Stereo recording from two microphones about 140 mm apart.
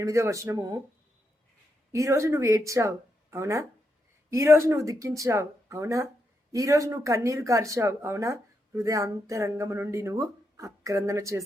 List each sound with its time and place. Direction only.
0.0 s speech: 20° right (ahead or behind)
1.9 s speech: 20° right (ahead or behind)